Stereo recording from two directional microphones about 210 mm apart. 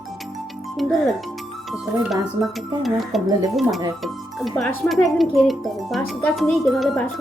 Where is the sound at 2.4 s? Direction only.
25° left (ahead or behind).